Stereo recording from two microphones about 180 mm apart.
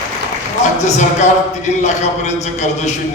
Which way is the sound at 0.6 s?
40° left (ahead or behind).